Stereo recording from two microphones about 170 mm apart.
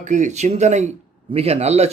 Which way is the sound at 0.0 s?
45° right (ahead or behind).